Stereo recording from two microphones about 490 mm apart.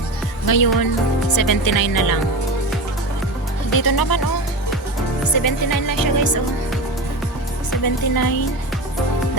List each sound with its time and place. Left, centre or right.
0.4 s music: left
1.3 s speech: left
3.8 s music: left
5.3 s music: left
7.9 s music: left